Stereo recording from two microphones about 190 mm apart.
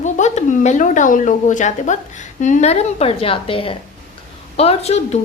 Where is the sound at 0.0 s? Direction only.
40° left (ahead or behind).